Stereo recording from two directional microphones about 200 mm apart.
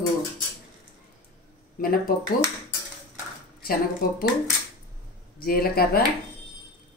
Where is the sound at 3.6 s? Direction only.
50° left (ahead or behind).